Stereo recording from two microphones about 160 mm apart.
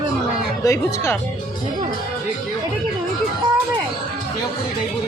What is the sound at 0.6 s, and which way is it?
Speech, 20° left (ahead or behind).